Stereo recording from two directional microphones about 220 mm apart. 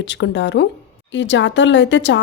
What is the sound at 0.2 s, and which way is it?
Speech, 55° left (ahead or behind).